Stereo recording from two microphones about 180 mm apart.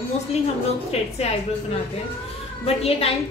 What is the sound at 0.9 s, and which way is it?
Speech, 35° left (ahead or behind).